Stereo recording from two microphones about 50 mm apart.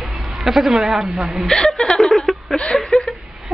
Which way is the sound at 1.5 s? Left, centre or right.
Centre.